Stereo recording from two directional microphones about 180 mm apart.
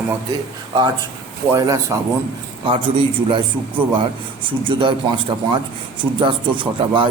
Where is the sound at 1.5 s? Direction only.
15° right (ahead or behind).